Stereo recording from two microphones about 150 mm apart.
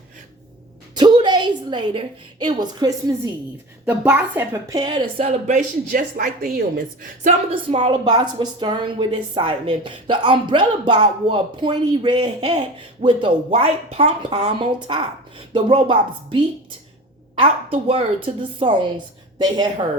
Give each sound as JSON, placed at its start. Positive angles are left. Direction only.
{"t": 0.9, "sound": "a woman's voice", "side_deg": -30}
{"t": 3.8, "sound": "a woman's voice", "side_deg": -10}
{"t": 4.7, "sound": "a woman's voice", "side_deg": -30}
{"t": 7.5, "sound": "a woman's voice", "side_deg": -35}
{"t": 17.4, "sound": "a woman's voice", "side_deg": -40}